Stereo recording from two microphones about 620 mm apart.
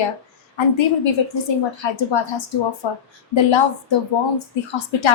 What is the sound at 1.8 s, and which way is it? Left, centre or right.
Speech, left.